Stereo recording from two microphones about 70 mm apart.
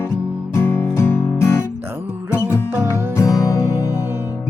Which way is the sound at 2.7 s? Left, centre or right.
Right.